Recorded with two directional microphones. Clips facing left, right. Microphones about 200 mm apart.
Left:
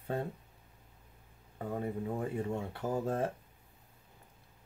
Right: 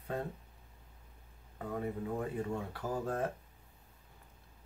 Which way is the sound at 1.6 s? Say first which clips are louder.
Left 1 dB; 25° left (ahead or behind).